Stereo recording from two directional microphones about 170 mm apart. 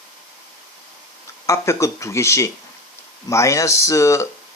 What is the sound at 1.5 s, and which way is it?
Speech, 15° left (ahead or behind).